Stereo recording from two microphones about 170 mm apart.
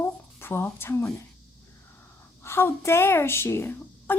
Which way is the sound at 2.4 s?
15° left (ahead or behind).